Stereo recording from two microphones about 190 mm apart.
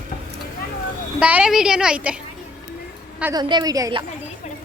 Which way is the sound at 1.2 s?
5° right (ahead or behind).